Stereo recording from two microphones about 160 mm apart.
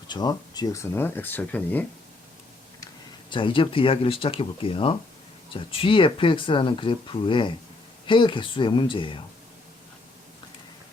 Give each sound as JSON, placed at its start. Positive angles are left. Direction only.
{"t": 0.1, "sound": "speech", "side_deg": 25}
{"t": 2.8, "sound": "speech", "side_deg": 30}